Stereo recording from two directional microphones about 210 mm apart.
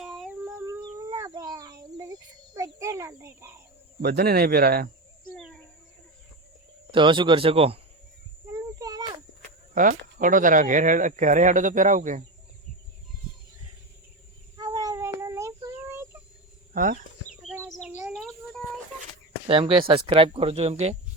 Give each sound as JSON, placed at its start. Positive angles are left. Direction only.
{"t": 0.0, "sound": "child singing", "side_deg": 0}
{"t": 2.6, "sound": "a sound", "side_deg": -15}
{"t": 4.0, "sound": "speech", "side_deg": -50}
{"t": 5.4, "sound": "a sound", "side_deg": 0}
{"t": 6.9, "sound": "speech", "side_deg": -25}
{"t": 8.5, "sound": "a sound", "side_deg": -15}
{"t": 9.7, "sound": "speech", "side_deg": -40}
{"t": 14.5, "sound": "child singing", "side_deg": -15}
{"t": 16.7, "sound": "speech", "side_deg": -40}
{"t": 17.6, "sound": "bird", "side_deg": -5}
{"t": 19.5, "sound": "speech", "side_deg": -25}